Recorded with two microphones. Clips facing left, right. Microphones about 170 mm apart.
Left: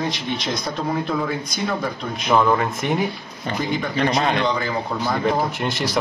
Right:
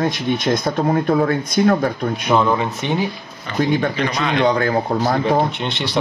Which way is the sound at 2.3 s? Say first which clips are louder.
Even; centre (ahead or behind).